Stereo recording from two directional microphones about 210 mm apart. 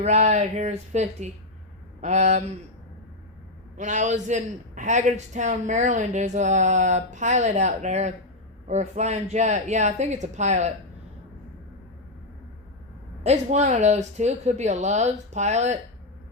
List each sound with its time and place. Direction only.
0.0 s a man's voice: 30° right (ahead or behind)
3.8 s a man's voice: 35° right (ahead or behind)
13.2 s a man's voice: 30° right (ahead or behind)